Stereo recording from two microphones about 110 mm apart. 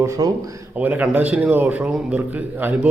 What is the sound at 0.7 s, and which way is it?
A man's voice, 15° right (ahead or behind).